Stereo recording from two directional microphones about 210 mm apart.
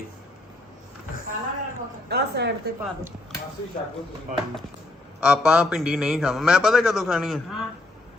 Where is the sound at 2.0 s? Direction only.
50° right (ahead or behind).